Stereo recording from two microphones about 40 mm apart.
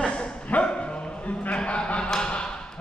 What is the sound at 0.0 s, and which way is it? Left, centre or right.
Dog, left.